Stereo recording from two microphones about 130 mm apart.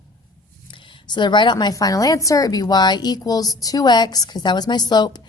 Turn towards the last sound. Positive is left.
turn(degrees=35)  # may be behind; listen again after turning